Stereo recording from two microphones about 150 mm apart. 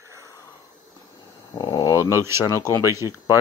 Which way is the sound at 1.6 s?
25° left (ahead or behind).